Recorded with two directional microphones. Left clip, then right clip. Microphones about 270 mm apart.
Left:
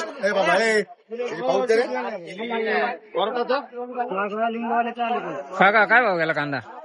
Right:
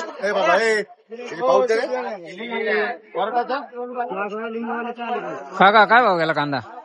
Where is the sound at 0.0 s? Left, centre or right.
Right.